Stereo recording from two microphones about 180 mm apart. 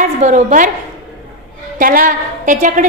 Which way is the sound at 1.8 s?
50° right (ahead or behind).